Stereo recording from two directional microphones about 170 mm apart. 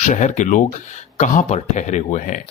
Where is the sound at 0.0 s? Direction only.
45° left (ahead or behind).